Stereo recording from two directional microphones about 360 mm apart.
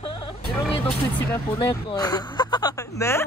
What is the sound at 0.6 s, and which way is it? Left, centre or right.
Speech, centre.